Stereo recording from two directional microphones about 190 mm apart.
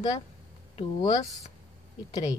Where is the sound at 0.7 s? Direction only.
20° left (ahead or behind).